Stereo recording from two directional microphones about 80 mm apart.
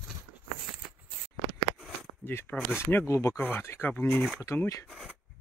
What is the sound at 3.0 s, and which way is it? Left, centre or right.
Speech, left.